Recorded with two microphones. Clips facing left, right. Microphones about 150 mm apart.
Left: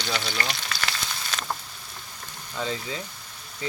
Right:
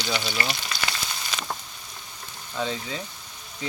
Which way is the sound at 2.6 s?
10° right (ahead or behind).